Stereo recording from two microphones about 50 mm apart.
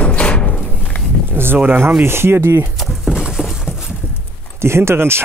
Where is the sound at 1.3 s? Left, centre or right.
Right.